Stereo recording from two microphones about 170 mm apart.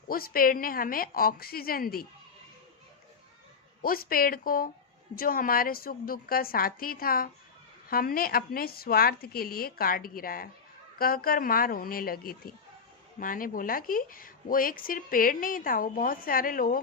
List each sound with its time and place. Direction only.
0.1 s a woman's voice: 60° left (ahead or behind)
3.8 s a woman's voice: 60° left (ahead or behind)